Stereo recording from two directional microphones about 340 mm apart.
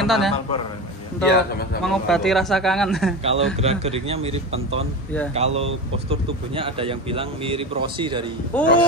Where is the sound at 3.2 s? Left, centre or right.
Centre.